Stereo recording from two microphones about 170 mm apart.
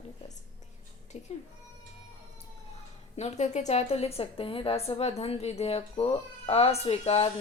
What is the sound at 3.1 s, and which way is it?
A woman's voice, 40° left (ahead or behind).